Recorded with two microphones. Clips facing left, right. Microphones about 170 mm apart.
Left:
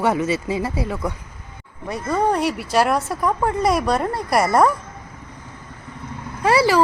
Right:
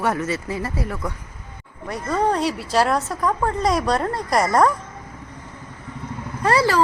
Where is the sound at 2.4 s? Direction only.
55° left (ahead or behind).